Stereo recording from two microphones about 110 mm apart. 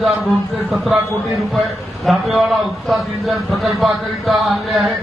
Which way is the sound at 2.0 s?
Centre (ahead or behind).